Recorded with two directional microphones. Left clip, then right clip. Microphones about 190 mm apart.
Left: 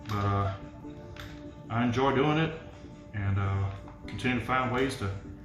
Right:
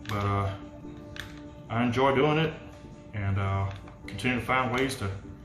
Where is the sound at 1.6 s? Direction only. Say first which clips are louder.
Right 3 dB; 15° right (ahead or behind).